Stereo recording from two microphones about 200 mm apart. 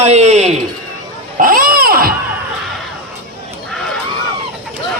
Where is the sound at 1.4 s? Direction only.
45° right (ahead or behind).